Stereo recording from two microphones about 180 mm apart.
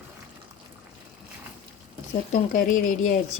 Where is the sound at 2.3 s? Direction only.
50° left (ahead or behind).